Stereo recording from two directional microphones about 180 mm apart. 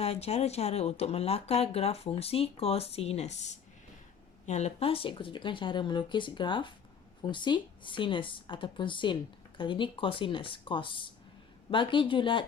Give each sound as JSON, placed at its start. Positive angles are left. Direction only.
{"t": 0.0, "sound": "speech", "side_deg": 35}